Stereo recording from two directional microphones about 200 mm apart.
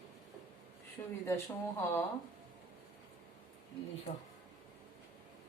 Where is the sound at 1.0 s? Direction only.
20° left (ahead or behind).